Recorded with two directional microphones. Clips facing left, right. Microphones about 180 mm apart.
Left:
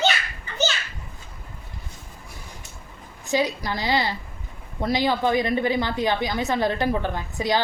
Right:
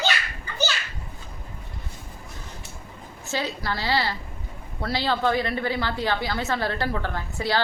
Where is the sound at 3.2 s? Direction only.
15° left (ahead or behind).